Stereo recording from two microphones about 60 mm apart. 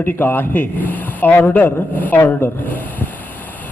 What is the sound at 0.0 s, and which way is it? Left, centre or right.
A man's voice, left.